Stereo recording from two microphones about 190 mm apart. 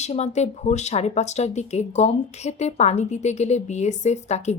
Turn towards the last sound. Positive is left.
turn(degrees=35)  # may be behind; listen again after turning